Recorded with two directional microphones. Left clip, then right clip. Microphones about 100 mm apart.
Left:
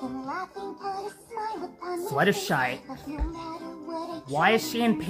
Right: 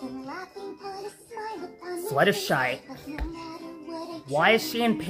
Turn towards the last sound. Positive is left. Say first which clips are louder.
# even
turn(degrees=-35)  # may be behind; listen again after turning